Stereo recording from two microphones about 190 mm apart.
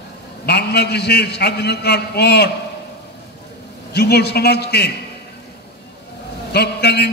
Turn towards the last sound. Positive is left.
turn(degrees=60)  # may be behind; listen again after turning